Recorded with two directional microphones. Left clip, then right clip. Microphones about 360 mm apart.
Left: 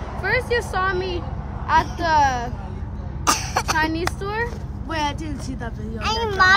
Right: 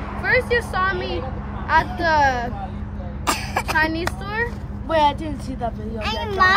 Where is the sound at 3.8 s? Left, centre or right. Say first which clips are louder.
Right 1 dB; centre.